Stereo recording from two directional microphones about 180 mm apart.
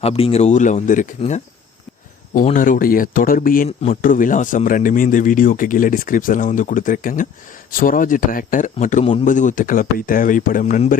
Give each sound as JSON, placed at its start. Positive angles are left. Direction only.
{"t": 0.0, "sound": "speech", "side_deg": 35}